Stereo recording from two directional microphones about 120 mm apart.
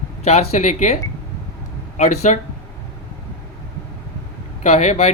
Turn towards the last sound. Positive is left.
turn(degrees=75)  # may be behind; listen again after turning